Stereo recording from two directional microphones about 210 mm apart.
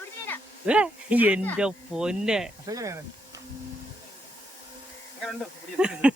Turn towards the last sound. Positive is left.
turn(degrees=-5)  # may be behind; listen again after turning